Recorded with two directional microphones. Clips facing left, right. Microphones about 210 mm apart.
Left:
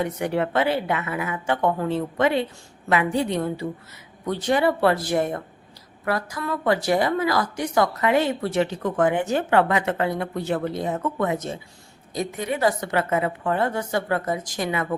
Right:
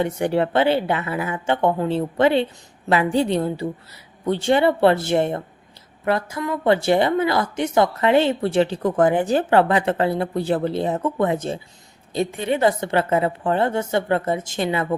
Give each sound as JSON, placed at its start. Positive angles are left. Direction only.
{"t": 0.0, "sound": "a woman's voice", "side_deg": -30}